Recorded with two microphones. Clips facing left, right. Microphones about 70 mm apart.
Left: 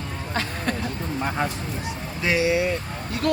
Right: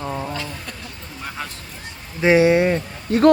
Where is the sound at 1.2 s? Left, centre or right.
Left.